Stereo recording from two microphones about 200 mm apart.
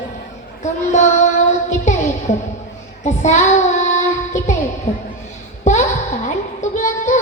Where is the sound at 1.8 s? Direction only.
35° left (ahead or behind).